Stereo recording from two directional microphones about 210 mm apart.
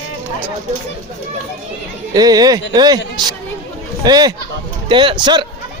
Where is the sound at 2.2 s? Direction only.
20° right (ahead or behind).